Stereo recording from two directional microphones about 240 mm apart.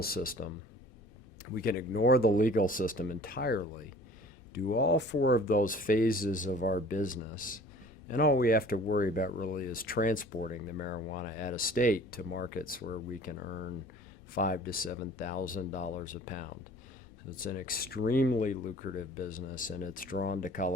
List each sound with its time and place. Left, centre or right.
0.0 s speech: left
1.5 s speech: left